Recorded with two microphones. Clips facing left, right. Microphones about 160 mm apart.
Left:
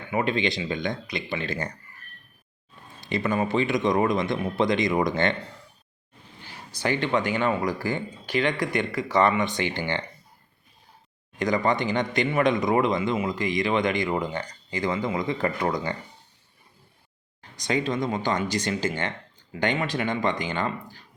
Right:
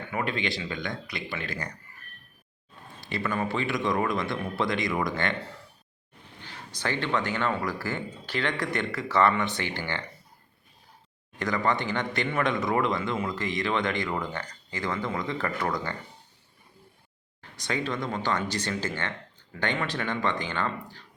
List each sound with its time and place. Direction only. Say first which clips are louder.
0.1 s speech: left 6 dB; 20° left (ahead or behind)
3.0 s speech: left 4 dB; 20° left (ahead or behind)
6.4 s speech: left 4 dB; 10° left (ahead or behind)
11.3 s speech: left 4 dB; 15° left (ahead or behind)
17.6 s speech: left 5 dB; 15° left (ahead or behind)